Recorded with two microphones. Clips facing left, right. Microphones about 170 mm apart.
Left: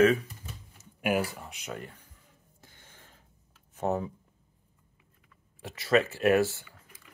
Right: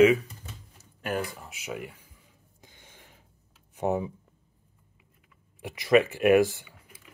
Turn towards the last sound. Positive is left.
turn(degrees=-15)  # may be behind; listen again after turning